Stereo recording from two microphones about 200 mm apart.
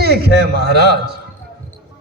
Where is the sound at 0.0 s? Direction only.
55° right (ahead or behind).